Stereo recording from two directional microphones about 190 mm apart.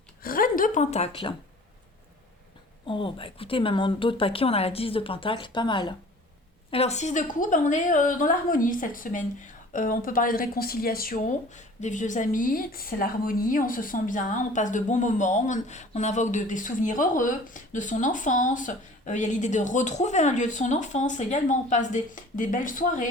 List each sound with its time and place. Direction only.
0.2 s a woman's voice: 50° left (ahead or behind); by 1.4 s 25° left (ahead or behind)
2.8 s a woman's voice: 25° left (ahead or behind); by 23.0 s 45° left (ahead or behind)